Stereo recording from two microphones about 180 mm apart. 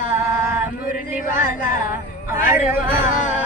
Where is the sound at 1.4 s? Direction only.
50° left (ahead or behind).